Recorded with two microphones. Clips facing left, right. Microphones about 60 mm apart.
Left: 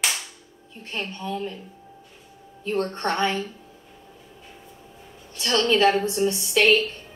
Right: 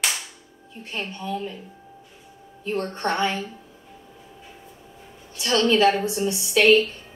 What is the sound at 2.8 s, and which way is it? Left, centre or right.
Speech, centre.